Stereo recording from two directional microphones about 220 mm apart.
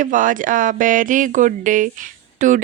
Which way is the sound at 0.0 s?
35° right (ahead or behind).